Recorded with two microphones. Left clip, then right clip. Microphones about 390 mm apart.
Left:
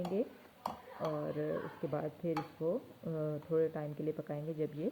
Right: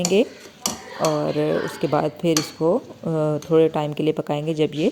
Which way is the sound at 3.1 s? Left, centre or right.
Centre.